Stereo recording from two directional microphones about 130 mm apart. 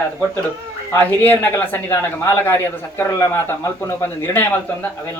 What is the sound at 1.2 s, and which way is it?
Speech, 15° left (ahead or behind).